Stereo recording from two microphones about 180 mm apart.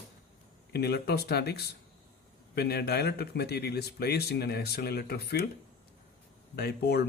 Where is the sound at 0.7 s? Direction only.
65° left (ahead or behind).